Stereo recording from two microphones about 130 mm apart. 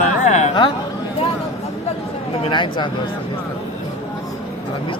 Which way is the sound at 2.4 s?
35° left (ahead or behind).